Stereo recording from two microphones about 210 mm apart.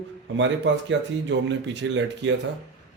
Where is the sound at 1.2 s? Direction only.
60° right (ahead or behind).